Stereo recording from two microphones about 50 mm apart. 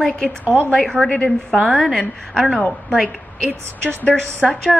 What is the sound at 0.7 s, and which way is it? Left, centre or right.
A woman's voice, centre.